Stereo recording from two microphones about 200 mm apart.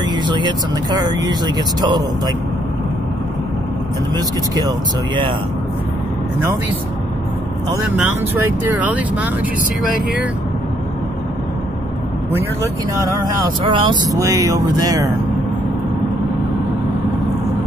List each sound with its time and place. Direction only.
0.0 s speech: 20° right (ahead or behind)
4.1 s speech: 20° right (ahead or behind)
7.7 s speech: 10° right (ahead or behind)
12.9 s speech: 20° right (ahead or behind)